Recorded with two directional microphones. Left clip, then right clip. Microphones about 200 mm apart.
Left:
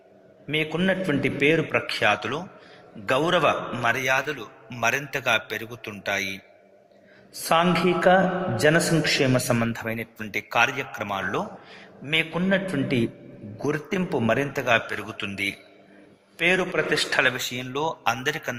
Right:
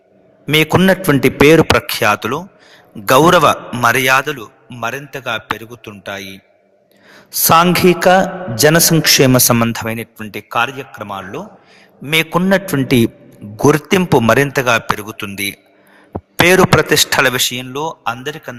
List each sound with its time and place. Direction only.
0.4 s a man's voice: 45° right (ahead or behind)
4.4 s a man's voice: centre (ahead or behind)
7.5 s a man's voice: 40° right (ahead or behind)
10.7 s a man's voice: centre (ahead or behind)
12.0 s a man's voice: 45° right (ahead or behind)
13.9 s a man's voice: 35° right (ahead or behind)
14.7 s a man's voice: 45° right (ahead or behind)
16.4 s a man's voice: 45° right (ahead or behind)
17.3 s a man's voice: 30° right (ahead or behind)
18.0 s a man's voice: centre (ahead or behind)